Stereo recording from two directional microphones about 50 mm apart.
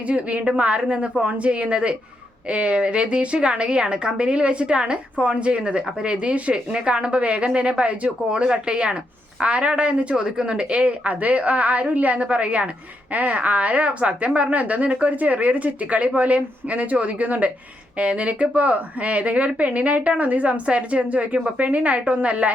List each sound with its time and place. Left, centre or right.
0.1 s a woman's voice: right